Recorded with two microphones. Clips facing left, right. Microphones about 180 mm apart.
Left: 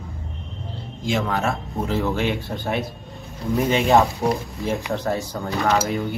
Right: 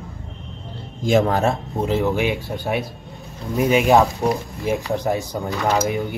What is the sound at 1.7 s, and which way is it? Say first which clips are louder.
Speech: right 3 dB; 20° right (ahead or behind).